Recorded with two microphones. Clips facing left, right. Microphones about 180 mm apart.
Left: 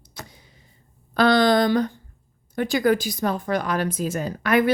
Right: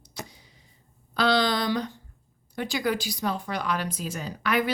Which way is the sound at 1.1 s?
50° left (ahead or behind).